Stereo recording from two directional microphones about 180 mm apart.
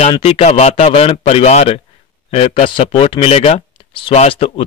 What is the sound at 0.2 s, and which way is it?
Speech, 35° left (ahead or behind).